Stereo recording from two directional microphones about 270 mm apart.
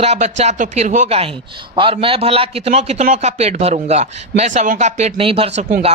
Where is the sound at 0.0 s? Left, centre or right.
Right.